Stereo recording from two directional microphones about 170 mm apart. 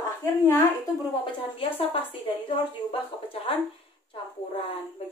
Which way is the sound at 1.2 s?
35° left (ahead or behind).